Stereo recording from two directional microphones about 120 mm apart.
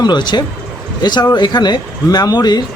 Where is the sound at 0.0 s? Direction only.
40° left (ahead or behind).